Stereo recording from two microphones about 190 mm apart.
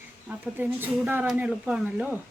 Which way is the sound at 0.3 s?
10° right (ahead or behind).